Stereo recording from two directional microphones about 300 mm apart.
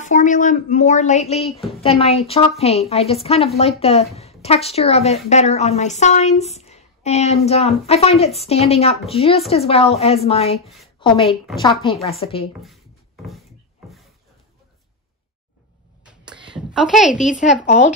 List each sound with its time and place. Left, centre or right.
0.0 s a woman's voice: left
11.2 s a woman's voice: centre
11.6 s a woman's voice: centre
12.6 s a sound: centre
16.0 s a sound: centre
16.5 s speech: centre